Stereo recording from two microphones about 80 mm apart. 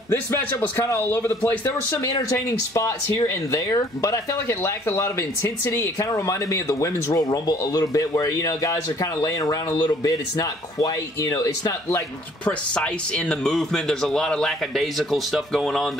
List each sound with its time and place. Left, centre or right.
0.6 s speech: left
1.9 s speech: left
12.4 s speech: centre